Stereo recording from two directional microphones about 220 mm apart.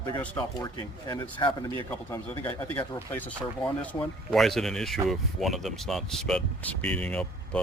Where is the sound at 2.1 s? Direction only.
10° left (ahead or behind).